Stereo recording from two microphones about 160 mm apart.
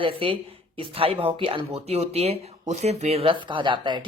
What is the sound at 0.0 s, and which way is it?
Speech, 35° right (ahead or behind).